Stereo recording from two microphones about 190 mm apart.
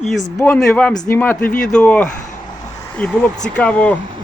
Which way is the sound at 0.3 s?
5° left (ahead or behind).